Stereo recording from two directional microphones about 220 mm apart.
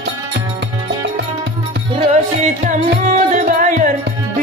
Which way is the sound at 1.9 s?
30° right (ahead or behind).